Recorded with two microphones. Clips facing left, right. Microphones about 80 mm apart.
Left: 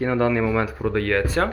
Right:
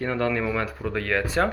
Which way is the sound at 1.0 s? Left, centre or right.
Centre.